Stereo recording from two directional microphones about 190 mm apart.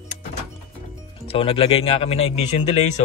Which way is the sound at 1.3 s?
30° left (ahead or behind).